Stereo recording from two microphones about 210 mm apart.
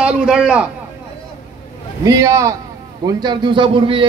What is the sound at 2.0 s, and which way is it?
A man's voice, 15° right (ahead or behind).